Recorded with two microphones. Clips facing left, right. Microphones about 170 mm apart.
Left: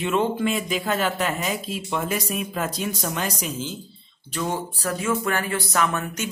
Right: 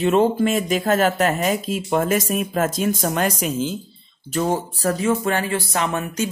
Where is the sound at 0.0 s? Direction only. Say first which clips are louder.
Right 6 dB; 40° right (ahead or behind).